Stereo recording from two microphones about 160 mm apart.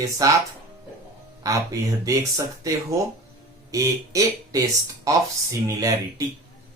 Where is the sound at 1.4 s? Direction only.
20° right (ahead or behind).